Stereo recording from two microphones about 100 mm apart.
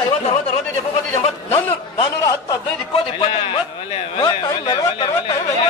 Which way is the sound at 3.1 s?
60° left (ahead or behind).